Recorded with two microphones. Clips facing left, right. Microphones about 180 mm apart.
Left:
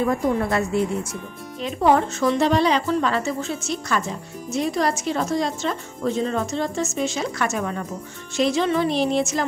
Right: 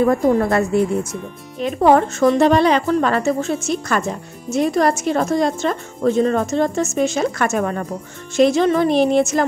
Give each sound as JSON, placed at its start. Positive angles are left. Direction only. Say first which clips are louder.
{"t": 0.0, "sound": "a woman's voice", "louder": "right 6 dB", "side_deg": -50}